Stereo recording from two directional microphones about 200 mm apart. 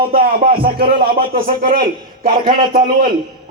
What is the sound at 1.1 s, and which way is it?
A man's voice, 45° right (ahead or behind).